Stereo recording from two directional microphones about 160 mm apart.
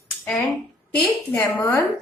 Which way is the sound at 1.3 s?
15° left (ahead or behind).